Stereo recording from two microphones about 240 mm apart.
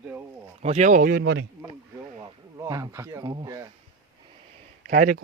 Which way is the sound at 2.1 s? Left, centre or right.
Centre.